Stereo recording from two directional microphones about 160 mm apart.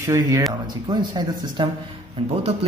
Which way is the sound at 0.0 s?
20° right (ahead or behind).